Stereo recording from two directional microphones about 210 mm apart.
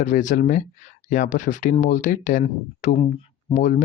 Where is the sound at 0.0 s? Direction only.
35° left (ahead or behind).